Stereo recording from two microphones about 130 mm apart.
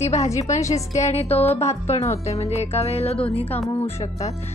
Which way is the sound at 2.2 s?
55° left (ahead or behind).